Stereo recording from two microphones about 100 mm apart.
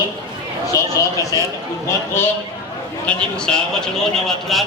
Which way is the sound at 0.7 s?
35° left (ahead or behind).